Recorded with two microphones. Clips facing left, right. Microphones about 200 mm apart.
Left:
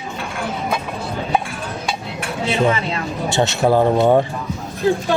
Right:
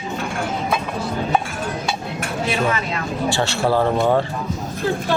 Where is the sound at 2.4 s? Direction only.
25° left (ahead or behind).